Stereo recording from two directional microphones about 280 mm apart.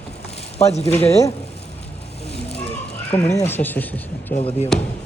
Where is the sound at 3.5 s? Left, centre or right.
Centre.